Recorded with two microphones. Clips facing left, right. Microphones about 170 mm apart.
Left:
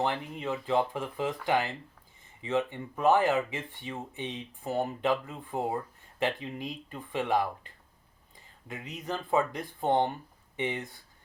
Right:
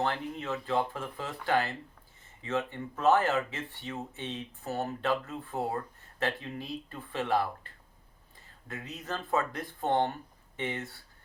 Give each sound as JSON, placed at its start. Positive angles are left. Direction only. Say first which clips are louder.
{"t": 0.0, "sound": "speech", "louder": "left 1 dB", "side_deg": 15}